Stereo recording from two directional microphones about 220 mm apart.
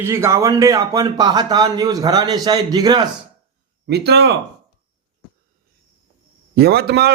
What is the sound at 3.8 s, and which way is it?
Speech, 50° right (ahead or behind).